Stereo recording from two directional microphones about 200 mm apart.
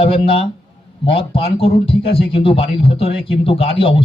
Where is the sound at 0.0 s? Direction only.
30° left (ahead or behind).